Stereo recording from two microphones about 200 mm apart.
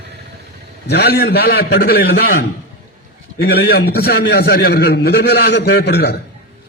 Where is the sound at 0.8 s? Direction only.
55° left (ahead or behind).